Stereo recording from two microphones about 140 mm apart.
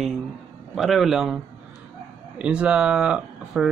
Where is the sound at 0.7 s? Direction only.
Centre (ahead or behind).